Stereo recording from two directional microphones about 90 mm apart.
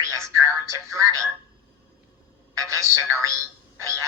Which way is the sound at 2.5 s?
35° right (ahead or behind).